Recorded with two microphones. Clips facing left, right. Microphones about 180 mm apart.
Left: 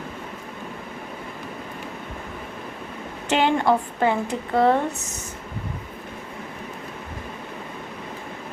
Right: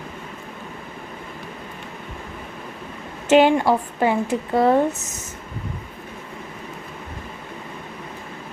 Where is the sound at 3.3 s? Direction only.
15° right (ahead or behind).